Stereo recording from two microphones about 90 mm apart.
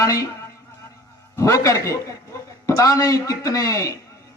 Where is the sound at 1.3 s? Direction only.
35° left (ahead or behind).